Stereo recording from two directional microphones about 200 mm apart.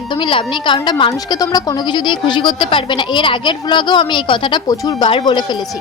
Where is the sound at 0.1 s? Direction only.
25° left (ahead or behind).